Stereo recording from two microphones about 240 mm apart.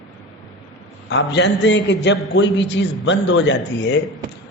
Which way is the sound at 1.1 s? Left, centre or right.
Left.